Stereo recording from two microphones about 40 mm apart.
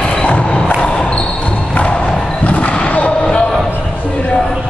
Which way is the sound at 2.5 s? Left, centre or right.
Left.